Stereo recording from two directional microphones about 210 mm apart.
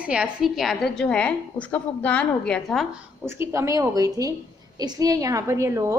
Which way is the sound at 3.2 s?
10° right (ahead or behind).